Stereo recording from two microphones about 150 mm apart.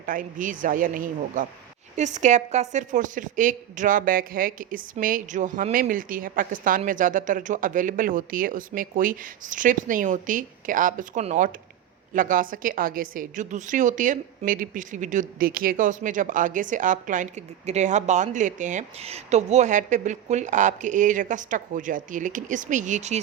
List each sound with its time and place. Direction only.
0.0 s a woman's voice: 65° right (ahead or behind)
2.0 s a woman's voice: 50° right (ahead or behind)